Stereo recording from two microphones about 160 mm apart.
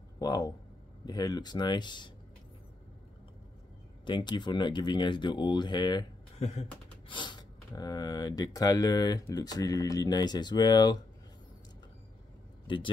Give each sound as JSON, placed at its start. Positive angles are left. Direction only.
{"t": 0.2, "sound": "speech", "side_deg": 25}
{"t": 4.0, "sound": "speech", "side_deg": 30}
{"t": 6.3, "sound": "speech", "side_deg": 40}
{"t": 7.1, "sound": "speech", "side_deg": 30}
{"t": 12.6, "sound": "speech", "side_deg": 30}